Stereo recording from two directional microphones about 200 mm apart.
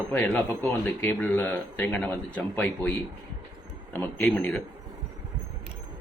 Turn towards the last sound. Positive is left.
turn(degrees=5)  # may be behind; listen again after turning